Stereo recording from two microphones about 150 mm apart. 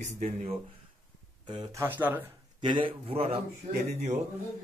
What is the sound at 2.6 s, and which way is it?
A man's voice, 35° right (ahead or behind).